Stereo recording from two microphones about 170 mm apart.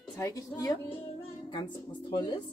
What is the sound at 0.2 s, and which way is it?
Speech, 20° left (ahead or behind).